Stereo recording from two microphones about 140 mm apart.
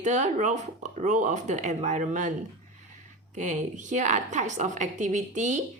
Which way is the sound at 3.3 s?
60° right (ahead or behind).